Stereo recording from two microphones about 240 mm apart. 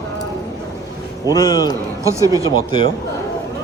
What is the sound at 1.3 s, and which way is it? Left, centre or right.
Speech, centre.